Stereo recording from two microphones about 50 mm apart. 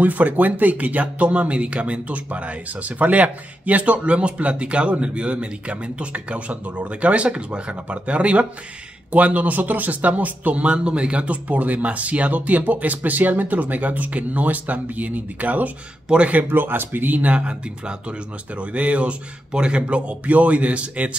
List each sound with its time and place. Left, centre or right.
0.0 s speech: right
16.4 s speech: right